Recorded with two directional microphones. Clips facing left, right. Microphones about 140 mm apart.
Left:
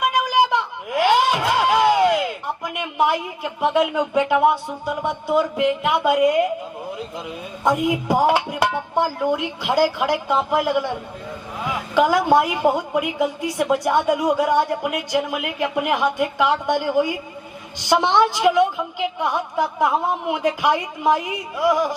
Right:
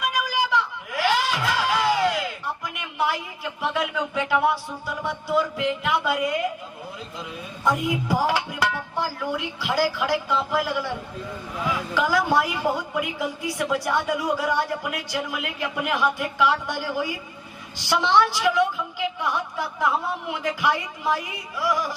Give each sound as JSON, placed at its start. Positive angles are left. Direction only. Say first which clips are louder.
{"t": 0.1, "sound": "music", "louder": "left 6 dB", "side_deg": 20}
{"t": 7.6, "sound": "a woman's voice", "louder": "left 4 dB", "side_deg": 20}